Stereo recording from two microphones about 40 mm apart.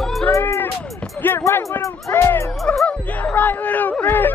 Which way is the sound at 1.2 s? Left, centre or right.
Left.